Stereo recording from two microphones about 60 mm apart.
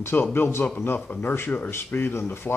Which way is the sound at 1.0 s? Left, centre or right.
Left.